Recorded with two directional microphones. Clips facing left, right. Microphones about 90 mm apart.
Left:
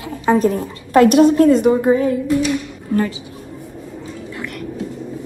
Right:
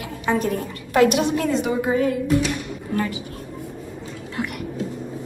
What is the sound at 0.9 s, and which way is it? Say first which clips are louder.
Speech: left 7 dB; 45° left (ahead or behind).